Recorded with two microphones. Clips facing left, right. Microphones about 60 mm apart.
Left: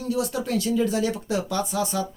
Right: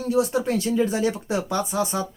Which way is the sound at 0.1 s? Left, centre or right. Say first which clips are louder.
Right 4 dB; right.